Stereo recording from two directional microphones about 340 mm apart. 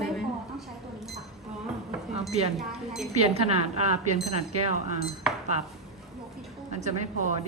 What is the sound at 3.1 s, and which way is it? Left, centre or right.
Speech, centre.